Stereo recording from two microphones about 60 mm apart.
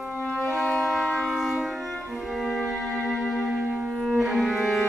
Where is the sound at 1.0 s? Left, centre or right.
Centre.